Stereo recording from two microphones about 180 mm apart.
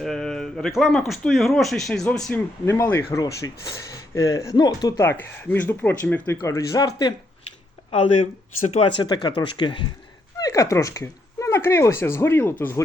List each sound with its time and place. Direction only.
0.0 s speech: centre (ahead or behind); by 7.1 s 20° left (ahead or behind)
7.9 s speech: 35° left (ahead or behind)
9.0 s speech: 25° left (ahead or behind)